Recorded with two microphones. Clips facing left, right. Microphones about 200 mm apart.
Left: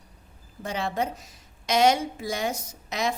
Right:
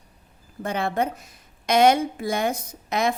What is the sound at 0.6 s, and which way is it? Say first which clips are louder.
A woman's voice: right 4 dB; 55° right (ahead or behind).